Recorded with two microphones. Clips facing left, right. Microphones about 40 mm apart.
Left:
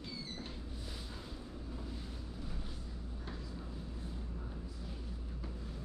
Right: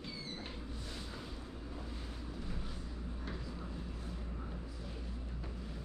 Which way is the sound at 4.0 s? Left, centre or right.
Right.